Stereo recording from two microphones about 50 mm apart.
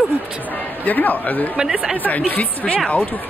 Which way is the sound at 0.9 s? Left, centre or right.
Left.